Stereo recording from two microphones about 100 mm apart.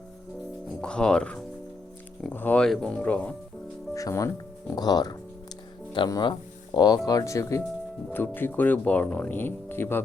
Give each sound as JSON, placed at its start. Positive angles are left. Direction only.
{"t": 0.8, "sound": "speech", "side_deg": 10}
{"t": 3.9, "sound": "speech", "side_deg": 35}
{"t": 8.1, "sound": "speech", "side_deg": 20}